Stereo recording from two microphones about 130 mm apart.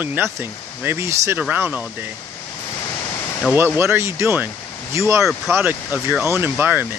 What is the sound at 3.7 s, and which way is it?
Speech, 20° right (ahead or behind).